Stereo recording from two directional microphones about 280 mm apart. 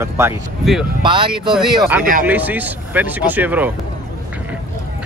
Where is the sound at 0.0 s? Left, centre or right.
Centre.